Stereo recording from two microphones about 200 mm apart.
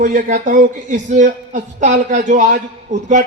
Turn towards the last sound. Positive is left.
turn(degrees=-40)  # may be behind; listen again after turning